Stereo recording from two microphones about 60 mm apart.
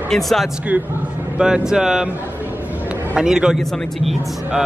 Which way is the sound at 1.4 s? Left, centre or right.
Centre.